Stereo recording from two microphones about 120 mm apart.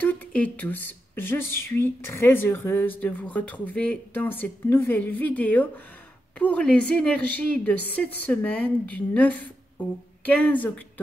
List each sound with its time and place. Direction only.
0.0 s speech: 10° left (ahead or behind)